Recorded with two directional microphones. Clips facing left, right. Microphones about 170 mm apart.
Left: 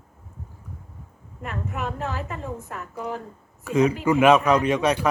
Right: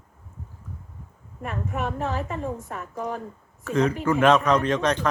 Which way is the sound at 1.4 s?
30° right (ahead or behind).